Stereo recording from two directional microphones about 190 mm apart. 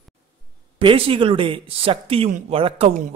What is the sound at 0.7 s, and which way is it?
A man's voice, 30° right (ahead or behind).